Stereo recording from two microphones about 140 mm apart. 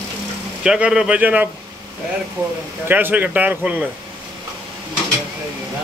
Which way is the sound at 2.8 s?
10° right (ahead or behind).